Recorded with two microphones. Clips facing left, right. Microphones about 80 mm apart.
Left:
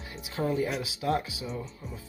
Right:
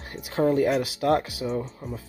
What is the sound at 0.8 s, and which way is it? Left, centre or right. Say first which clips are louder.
Speech: right 6 dB; right.